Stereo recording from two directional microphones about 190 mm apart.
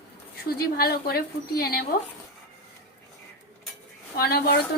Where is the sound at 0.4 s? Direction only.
55° left (ahead or behind).